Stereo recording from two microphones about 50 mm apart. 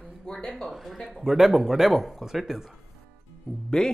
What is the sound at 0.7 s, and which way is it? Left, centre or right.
Speech, centre.